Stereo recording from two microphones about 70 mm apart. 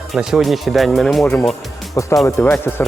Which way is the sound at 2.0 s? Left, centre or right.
Left.